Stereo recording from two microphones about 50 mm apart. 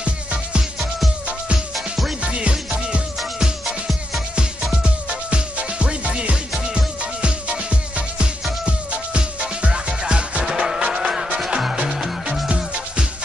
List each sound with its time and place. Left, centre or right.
0.0 s music: right
2.2 s music: right
3.2 s music: centre
4.8 s music: right